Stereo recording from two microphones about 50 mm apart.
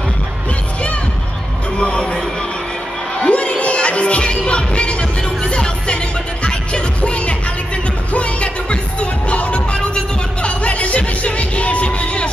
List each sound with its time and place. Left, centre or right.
1.8 s music: centre